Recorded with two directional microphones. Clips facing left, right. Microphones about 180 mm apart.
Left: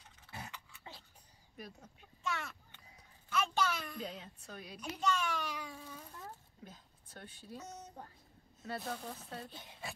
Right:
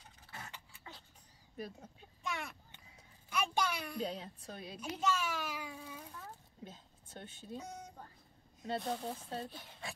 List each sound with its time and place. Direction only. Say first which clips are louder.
0.5 s dog: left 1 dB; 30° right (ahead or behind)
1.6 s a woman's voice: right 5 dB; 30° right (ahead or behind)
2.2 s a sound: left 1 dB; 15° right (ahead or behind)
4.0 s a woman's voice: right 5 dB; 35° right (ahead or behind)
5.0 s a child's voice: left 1 dB; 5° right (ahead or behind)
6.6 s speech: right 3 dB; 25° right (ahead or behind)
7.5 s speech: right 3 dB; 10° right (ahead or behind)
8.6 s speech: right 4 dB; 25° right (ahead or behind)
9.8 s a sound: even; 5° left (ahead or behind)